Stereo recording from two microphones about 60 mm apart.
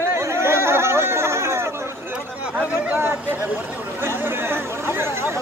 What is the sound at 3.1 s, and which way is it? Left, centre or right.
Speech, right.